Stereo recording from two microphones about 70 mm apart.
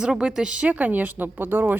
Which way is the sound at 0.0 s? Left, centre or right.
Centre.